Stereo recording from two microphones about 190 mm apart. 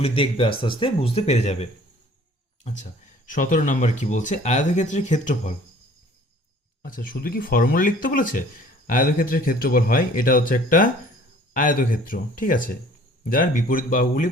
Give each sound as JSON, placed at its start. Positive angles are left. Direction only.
{"t": 0.0, "sound": "speech", "side_deg": 30}
{"t": 3.2, "sound": "speech", "side_deg": 45}
{"t": 6.8, "sound": "speech", "side_deg": 50}